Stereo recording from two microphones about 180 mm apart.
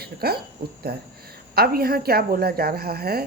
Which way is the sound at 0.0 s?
60° right (ahead or behind).